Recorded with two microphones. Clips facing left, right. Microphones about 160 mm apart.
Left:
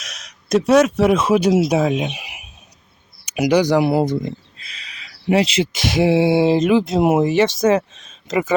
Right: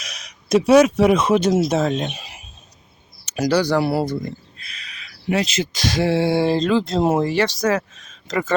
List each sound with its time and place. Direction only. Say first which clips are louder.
0.0 s speech: even; centre (ahead or behind); by 8.5 s 20° left (ahead or behind)